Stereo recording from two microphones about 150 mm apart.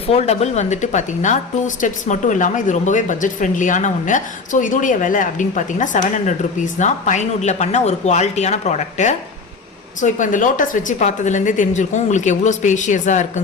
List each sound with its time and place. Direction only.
0.1 s a woman's voice: 45° left (ahead or behind)